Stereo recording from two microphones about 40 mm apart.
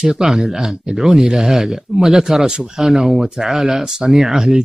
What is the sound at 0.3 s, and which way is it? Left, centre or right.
Speech, centre.